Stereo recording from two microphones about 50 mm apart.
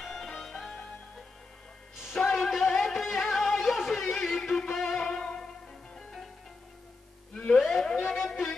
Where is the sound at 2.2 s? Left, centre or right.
Centre.